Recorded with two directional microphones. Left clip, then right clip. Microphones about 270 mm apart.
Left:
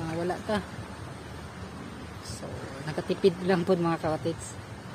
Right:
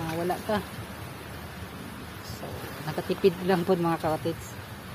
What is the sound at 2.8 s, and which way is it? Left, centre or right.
A woman's voice, centre.